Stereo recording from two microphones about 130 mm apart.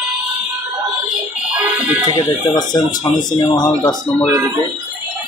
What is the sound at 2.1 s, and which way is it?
Speech, 30° left (ahead or behind).